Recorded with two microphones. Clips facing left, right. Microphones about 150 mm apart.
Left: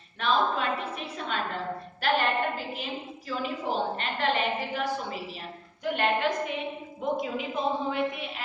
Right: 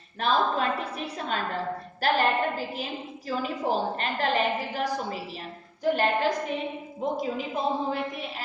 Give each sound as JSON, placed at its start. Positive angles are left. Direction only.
{"t": 0.2, "sound": "a woman's voice", "side_deg": -40}